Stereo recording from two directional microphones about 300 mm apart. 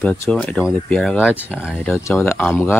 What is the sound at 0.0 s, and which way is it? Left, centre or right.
Speech, centre.